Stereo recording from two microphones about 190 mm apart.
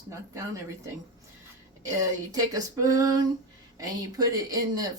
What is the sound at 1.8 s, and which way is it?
A woman's voice, 15° right (ahead or behind).